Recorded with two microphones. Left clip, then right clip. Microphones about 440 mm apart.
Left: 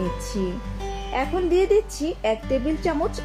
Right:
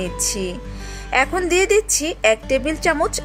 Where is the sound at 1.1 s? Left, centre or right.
Right.